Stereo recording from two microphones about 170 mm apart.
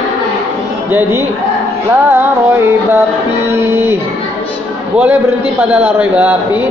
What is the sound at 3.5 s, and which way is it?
Speech, 15° right (ahead or behind).